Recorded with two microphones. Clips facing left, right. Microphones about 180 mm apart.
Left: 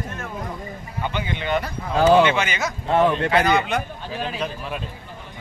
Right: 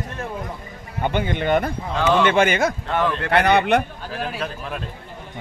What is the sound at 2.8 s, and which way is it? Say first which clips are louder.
Speech: left 4 dB; 25° left (ahead or behind).